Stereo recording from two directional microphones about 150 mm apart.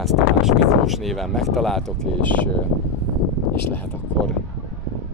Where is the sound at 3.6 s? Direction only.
10° left (ahead or behind).